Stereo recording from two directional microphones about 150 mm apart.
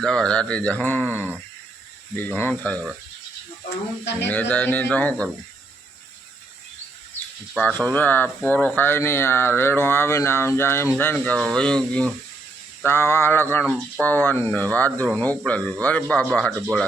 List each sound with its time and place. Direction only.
0.0 s speech: 5° left (ahead or behind)
2.1 s speech: 10° left (ahead or behind)
4.3 s speech: 10° left (ahead or behind)
7.5 s speech: 10° left (ahead or behind)